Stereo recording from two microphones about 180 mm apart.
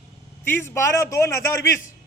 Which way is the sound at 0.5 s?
15° left (ahead or behind).